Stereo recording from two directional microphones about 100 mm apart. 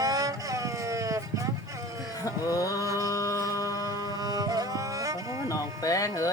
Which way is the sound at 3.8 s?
40° right (ahead or behind).